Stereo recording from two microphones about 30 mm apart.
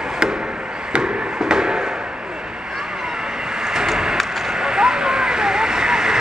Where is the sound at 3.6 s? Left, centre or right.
Centre.